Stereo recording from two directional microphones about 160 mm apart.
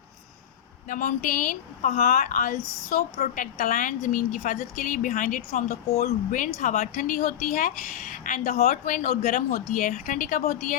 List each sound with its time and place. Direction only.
0.9 s a woman's voice: 55° left (ahead or behind)